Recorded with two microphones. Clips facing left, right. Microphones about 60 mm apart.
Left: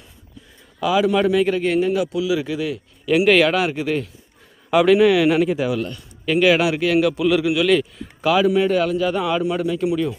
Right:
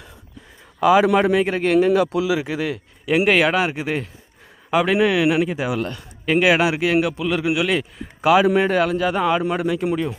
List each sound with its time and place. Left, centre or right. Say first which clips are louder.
0.8 s speech: right 3 dB; right
1.6 s speech: right 3 dB; right
2.0 s speech: right 1 dB; right
3.2 s a man's voice: left 2 dB; centre
5.8 s a man's voice: even; right
6.4 s a man's voice: left 2 dB; right
7.2 s a man's voice: left 5 dB; centre
7.4 s a man's voice: left 3 dB; centre
8.4 s speech: even; right